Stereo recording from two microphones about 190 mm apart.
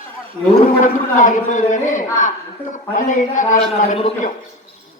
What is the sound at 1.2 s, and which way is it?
A man's voice, 40° left (ahead or behind).